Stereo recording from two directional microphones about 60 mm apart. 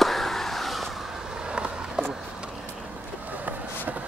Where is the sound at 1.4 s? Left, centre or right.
Centre.